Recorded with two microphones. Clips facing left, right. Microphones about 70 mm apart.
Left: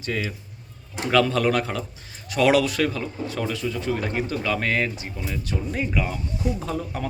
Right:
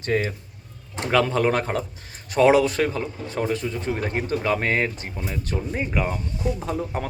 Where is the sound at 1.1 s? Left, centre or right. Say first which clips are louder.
Even; right.